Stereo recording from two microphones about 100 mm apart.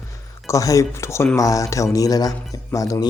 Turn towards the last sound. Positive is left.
turn(degrees=35)  # may be behind; listen again after turning